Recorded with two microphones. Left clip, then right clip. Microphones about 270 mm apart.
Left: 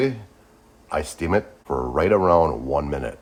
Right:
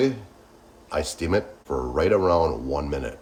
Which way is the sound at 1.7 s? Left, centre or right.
Left.